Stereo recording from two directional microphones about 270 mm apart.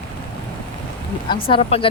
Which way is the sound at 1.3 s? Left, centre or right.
Centre.